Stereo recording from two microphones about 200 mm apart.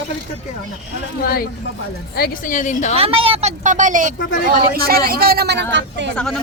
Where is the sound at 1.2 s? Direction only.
50° left (ahead or behind).